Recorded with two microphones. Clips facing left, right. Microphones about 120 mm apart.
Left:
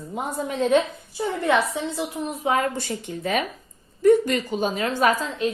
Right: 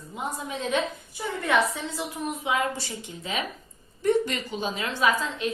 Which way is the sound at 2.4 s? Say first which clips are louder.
Left 5 dB; 50° left (ahead or behind).